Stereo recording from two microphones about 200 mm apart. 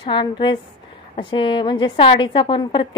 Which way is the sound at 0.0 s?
25° left (ahead or behind).